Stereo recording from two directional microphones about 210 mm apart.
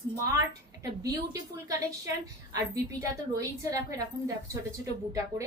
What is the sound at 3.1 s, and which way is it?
Speech, 15° right (ahead or behind).